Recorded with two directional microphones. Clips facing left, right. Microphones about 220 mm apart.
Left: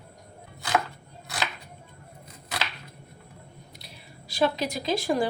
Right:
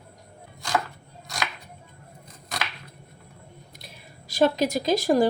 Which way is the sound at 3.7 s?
50° right (ahead or behind).